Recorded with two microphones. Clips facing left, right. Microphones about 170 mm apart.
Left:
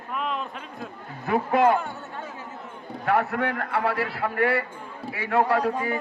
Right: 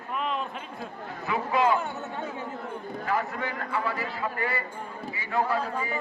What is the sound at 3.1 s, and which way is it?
A man's voice, 70° left (ahead or behind).